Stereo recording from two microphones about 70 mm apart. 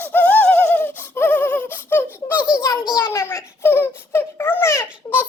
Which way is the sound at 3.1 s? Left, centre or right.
Left.